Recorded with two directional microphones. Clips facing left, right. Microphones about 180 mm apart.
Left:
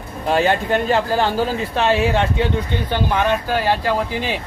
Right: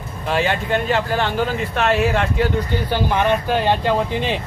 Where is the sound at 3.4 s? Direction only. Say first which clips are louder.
Right 1 dB; 5° left (ahead or behind).